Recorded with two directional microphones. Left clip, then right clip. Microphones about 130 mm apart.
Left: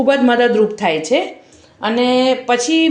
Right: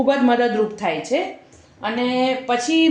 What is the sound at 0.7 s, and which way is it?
Speech, 55° left (ahead or behind).